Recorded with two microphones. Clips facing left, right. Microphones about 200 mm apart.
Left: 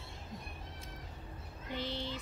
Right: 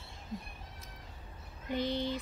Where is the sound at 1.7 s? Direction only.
15° right (ahead or behind).